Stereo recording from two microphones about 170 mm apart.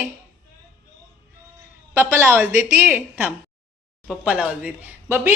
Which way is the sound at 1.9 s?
15° right (ahead or behind).